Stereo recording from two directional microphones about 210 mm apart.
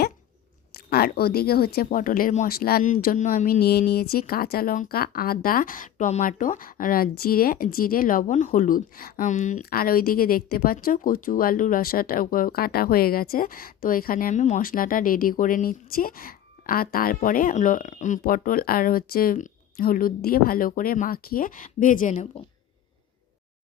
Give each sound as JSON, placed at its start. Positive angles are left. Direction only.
{"t": 0.7, "sound": "speech", "side_deg": 45}